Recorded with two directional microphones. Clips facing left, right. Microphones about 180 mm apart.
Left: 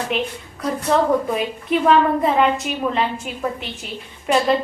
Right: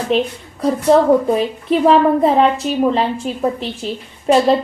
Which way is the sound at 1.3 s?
35° right (ahead or behind).